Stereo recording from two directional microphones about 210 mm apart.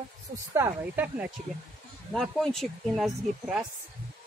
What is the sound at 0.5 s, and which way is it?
Speech, 10° right (ahead or behind).